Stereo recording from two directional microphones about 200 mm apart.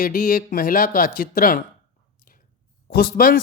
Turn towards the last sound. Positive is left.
turn(degrees=50)  # may be behind; listen again after turning